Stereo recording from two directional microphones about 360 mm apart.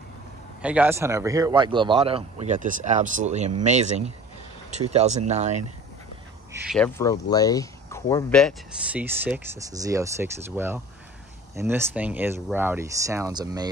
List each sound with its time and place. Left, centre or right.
0.6 s speech: centre
6.5 s speech: centre